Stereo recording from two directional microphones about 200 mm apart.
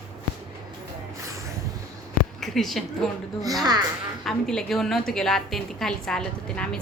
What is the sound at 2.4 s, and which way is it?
Speech, centre (ahead or behind).